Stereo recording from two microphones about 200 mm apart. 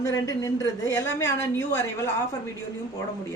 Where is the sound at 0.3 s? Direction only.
15° left (ahead or behind).